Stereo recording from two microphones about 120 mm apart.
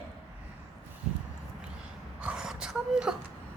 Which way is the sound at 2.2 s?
5° right (ahead or behind).